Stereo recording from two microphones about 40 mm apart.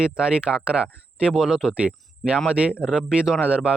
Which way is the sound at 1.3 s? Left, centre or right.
Centre.